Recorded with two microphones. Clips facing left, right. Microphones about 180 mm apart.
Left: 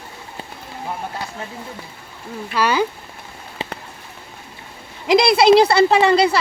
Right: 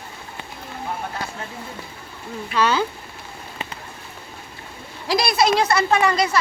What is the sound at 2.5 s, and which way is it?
Speech, 10° left (ahead or behind).